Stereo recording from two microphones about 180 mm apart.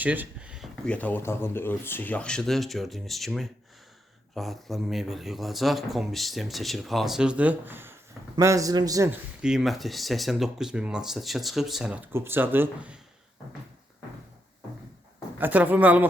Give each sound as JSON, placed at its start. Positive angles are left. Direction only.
{"t": 0.0, "sound": "a sound", "side_deg": -10}
{"t": 0.9, "sound": "a man's voice", "side_deg": 10}
{"t": 9.4, "sound": "speech", "side_deg": -5}
{"t": 15.4, "sound": "speech", "side_deg": -10}